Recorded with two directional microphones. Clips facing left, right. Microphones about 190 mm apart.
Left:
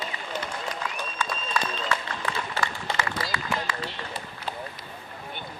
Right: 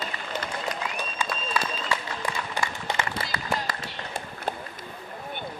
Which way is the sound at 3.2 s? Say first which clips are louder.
Even; 35° right (ahead or behind).